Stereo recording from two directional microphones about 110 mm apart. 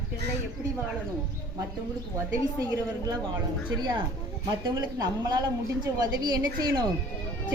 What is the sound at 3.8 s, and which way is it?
A woman's voice, 40° right (ahead or behind).